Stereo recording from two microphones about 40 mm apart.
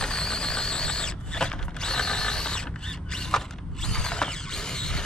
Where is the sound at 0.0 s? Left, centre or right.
Centre.